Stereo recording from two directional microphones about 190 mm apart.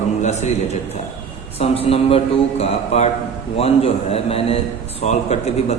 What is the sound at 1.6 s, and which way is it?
A man's voice, 30° left (ahead or behind).